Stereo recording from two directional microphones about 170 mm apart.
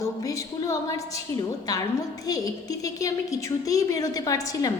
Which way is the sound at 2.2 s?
20° left (ahead or behind).